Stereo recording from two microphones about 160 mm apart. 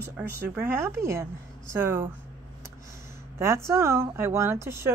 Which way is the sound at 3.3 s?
15° right (ahead or behind).